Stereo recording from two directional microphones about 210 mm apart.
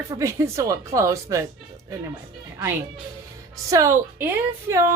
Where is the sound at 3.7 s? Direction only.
15° right (ahead or behind).